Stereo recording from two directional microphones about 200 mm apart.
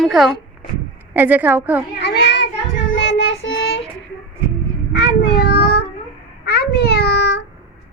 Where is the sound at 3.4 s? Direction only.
55° left (ahead or behind).